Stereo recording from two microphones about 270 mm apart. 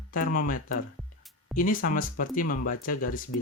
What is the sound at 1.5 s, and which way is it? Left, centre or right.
Speech, left.